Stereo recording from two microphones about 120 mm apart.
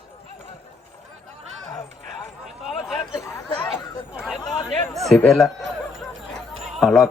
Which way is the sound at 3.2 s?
25° left (ahead or behind).